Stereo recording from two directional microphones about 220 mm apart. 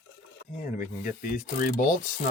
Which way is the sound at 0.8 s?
35° left (ahead or behind).